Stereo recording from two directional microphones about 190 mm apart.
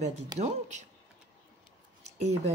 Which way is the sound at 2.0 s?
35° right (ahead or behind).